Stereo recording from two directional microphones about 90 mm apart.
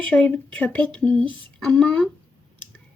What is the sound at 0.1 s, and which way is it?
Speech, 15° left (ahead or behind).